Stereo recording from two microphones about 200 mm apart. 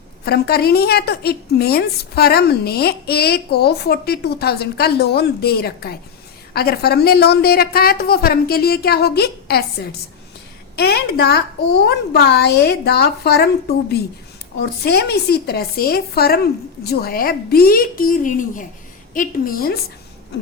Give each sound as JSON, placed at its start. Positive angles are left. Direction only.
{"t": 0.3, "sound": "a woman's voice", "side_deg": 50}
{"t": 10.8, "sound": "a woman's voice", "side_deg": 50}